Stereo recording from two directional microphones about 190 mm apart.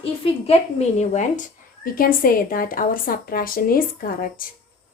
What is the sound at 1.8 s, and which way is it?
A woman's voice, 50° left (ahead or behind).